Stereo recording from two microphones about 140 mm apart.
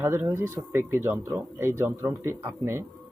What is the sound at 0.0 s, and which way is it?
Speech, 15° right (ahead or behind).